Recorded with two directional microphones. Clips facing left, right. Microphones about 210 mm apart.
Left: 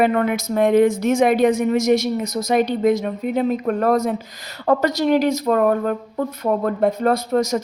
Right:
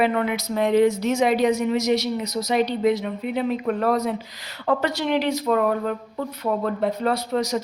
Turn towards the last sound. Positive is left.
turn(degrees=45)  # may be behind; listen again after turning